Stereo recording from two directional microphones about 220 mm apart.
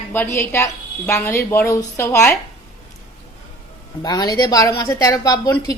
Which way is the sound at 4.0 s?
20° left (ahead or behind).